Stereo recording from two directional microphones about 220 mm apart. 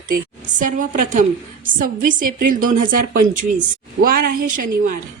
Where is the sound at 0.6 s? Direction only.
35° right (ahead or behind).